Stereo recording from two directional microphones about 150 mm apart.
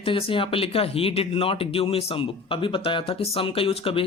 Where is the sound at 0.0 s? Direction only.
35° left (ahead or behind).